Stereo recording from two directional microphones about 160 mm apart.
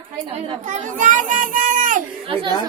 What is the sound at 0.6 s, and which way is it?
A child's voice, 50° right (ahead or behind).